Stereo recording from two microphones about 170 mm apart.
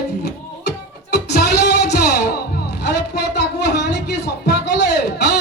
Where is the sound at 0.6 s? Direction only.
75° left (ahead or behind).